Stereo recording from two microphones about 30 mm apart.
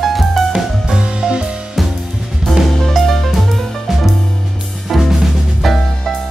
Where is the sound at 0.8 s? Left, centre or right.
Right.